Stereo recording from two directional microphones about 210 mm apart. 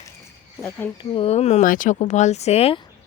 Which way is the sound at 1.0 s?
25° left (ahead or behind).